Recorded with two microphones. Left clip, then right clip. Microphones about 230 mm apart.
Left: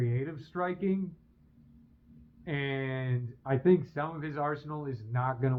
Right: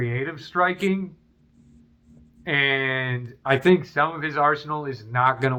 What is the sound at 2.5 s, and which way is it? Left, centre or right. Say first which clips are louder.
A man's voice: right 14 dB; centre.